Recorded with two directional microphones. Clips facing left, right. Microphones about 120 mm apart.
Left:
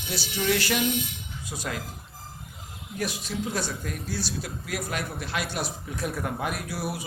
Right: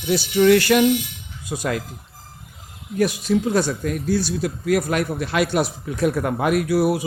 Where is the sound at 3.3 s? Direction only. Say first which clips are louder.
Right 14 dB; 55° right (ahead or behind).